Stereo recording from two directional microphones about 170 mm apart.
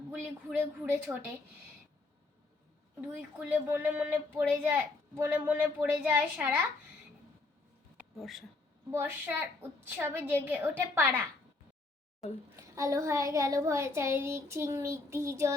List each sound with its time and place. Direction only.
0.1 s a woman's voice: 10° right (ahead or behind)
3.2 s a woman's voice: 10° right (ahead or behind)
8.2 s speech: centre (ahead or behind)
8.9 s a woman's voice: 10° right (ahead or behind)
12.5 s a woman's voice: 20° right (ahead or behind)